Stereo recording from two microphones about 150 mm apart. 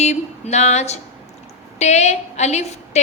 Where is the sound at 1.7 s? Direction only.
50° left (ahead or behind).